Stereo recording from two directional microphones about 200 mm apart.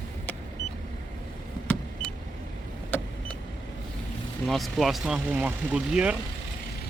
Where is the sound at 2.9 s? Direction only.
10° left (ahead or behind).